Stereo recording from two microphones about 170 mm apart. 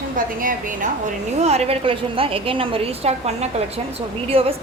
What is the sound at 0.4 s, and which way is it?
Speech, 50° right (ahead or behind).